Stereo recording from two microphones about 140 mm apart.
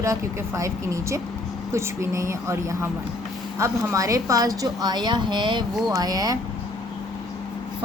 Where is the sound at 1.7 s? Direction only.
20° right (ahead or behind).